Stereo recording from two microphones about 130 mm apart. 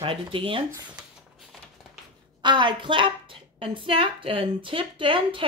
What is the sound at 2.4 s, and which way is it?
A woman's voice, 35° right (ahead or behind).